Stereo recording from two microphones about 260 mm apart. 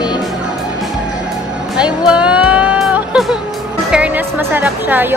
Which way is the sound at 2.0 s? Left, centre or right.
Centre.